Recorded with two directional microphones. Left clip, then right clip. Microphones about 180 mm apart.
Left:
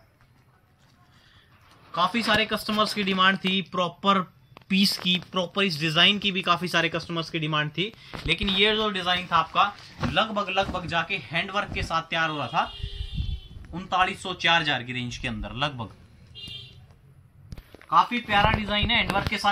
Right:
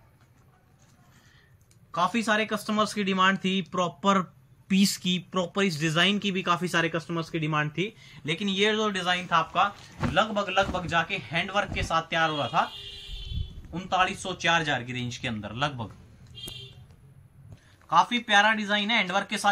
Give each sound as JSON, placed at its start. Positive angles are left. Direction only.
{"t": 1.9, "sound": "a man's voice", "side_deg": -5}
{"t": 13.7, "sound": "speech", "side_deg": -10}
{"t": 17.8, "sound": "speech", "side_deg": -25}